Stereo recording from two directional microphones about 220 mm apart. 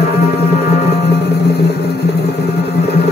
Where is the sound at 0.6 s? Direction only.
30° left (ahead or behind).